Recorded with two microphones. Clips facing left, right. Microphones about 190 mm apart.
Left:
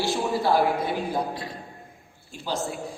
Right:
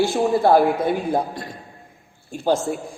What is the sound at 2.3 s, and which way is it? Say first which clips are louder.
Speech: right 9 dB; 50° right (ahead or behind).